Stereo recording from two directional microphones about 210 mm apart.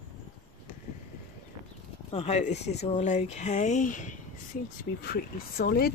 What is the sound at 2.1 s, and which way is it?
Speech, 30° left (ahead or behind).